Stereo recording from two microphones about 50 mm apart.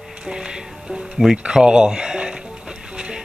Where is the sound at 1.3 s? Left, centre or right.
Centre.